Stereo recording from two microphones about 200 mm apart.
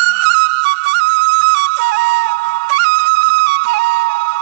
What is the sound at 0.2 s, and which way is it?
Flute, 65° right (ahead or behind).